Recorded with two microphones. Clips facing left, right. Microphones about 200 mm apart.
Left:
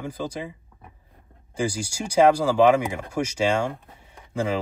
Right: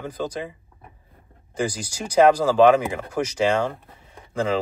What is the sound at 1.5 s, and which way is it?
Speech, 10° left (ahead or behind).